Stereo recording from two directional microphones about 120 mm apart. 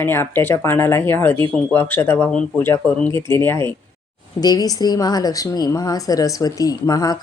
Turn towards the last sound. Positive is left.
turn(degrees=30)  # may be behind; listen again after turning